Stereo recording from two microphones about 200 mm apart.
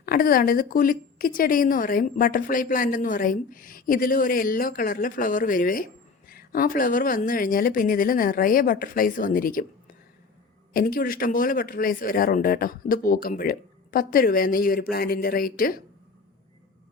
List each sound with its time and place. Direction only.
0.0 s a woman's voice: 45° left (ahead or behind)